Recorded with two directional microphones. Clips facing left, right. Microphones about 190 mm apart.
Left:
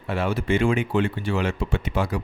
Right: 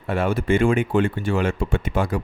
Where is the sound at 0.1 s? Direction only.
50° right (ahead or behind).